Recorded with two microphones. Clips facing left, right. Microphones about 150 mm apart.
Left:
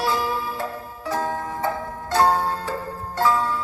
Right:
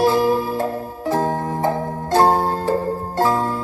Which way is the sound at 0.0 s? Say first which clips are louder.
Right 8 dB; 45° right (ahead or behind).